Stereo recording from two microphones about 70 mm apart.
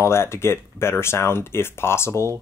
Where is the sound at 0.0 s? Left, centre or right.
Left.